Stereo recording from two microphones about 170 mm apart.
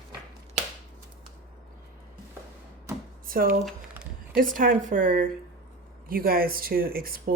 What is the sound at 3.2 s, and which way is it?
Speech, 55° right (ahead or behind).